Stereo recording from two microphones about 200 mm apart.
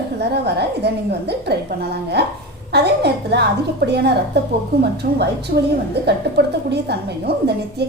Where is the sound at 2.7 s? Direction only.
55° right (ahead or behind).